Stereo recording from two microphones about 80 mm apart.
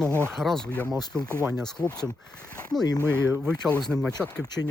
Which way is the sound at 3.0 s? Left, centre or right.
Right.